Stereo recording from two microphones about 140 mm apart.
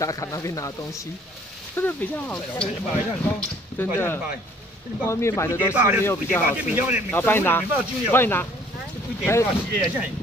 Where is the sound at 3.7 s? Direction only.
15° left (ahead or behind).